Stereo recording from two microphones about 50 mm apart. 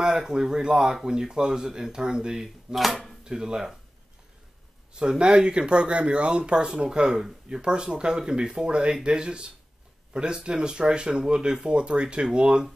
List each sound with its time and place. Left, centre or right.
0.0 s speech: centre
3.3 s speech: centre
4.9 s speech: centre